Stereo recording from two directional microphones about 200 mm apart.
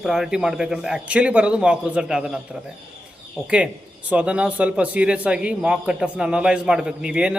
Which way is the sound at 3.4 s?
5° right (ahead or behind).